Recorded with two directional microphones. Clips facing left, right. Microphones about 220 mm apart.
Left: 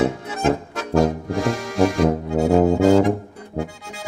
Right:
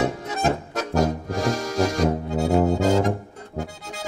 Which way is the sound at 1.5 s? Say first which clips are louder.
Right 1 dB; 40° right (ahead or behind).